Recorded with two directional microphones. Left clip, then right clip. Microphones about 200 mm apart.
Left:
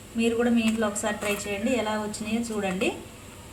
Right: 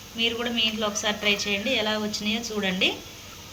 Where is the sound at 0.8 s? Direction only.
30° left (ahead or behind).